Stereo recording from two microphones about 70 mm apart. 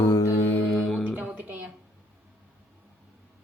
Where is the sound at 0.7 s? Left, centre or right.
Centre.